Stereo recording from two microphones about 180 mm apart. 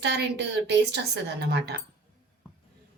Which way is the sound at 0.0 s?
70° right (ahead or behind).